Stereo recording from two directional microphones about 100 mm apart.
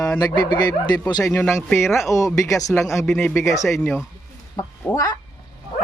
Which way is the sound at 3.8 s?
10° left (ahead or behind).